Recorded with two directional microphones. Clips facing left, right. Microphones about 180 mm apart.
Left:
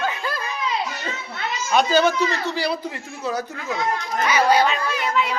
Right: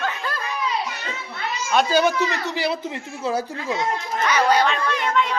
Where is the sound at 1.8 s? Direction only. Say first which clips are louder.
Left 1 dB; 15° right (ahead or behind).